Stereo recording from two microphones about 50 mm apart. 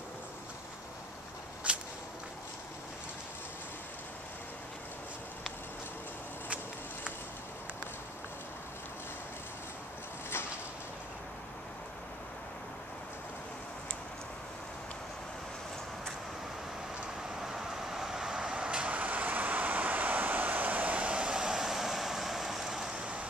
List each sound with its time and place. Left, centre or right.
1.6 s whip: right
17.4 s vehicle: centre